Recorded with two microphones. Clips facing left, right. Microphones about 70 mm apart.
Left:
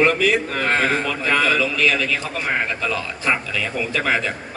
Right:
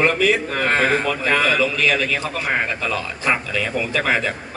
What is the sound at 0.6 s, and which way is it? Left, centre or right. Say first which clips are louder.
A man's voice: right 1 dB; right.